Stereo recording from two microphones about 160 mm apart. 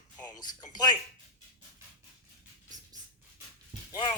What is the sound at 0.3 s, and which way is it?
Speech, 25° left (ahead or behind).